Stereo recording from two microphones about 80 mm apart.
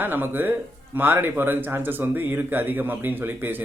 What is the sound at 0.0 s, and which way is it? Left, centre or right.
Speech, right.